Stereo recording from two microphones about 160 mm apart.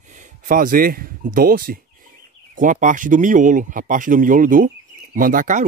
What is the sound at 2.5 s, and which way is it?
Speech, 55° right (ahead or behind).